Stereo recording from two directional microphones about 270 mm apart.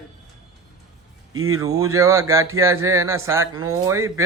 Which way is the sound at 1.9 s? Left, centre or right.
Centre.